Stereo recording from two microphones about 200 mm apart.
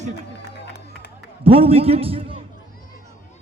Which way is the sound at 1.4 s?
30° right (ahead or behind).